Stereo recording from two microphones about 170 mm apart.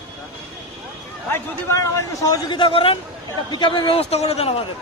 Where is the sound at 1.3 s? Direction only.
20° left (ahead or behind); by 4.5 s 40° left (ahead or behind).